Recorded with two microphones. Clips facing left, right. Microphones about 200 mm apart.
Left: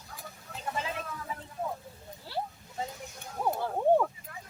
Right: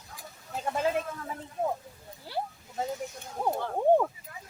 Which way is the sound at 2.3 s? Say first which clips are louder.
Right 1 dB; 15° right (ahead or behind).